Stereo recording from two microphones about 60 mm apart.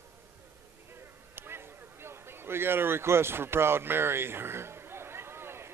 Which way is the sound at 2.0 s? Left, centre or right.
Right.